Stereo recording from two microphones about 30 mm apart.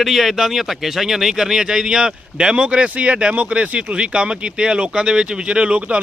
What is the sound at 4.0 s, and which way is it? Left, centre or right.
Speech, right.